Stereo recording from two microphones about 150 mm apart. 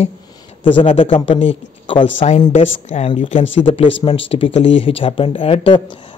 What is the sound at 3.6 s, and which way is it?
Speech, 35° left (ahead or behind).